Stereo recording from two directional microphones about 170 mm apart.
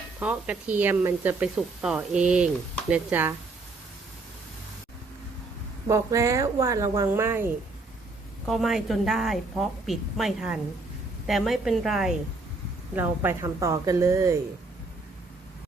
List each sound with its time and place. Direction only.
0.2 s speech: 10° right (ahead or behind)
5.9 s speech: 20° right (ahead or behind)
8.4 s a woman's voice: centre (ahead or behind)
13.0 s speech: 15° right (ahead or behind)